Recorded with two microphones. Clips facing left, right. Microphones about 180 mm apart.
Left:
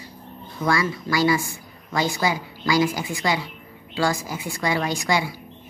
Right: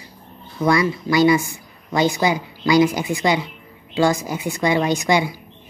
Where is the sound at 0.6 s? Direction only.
20° right (ahead or behind).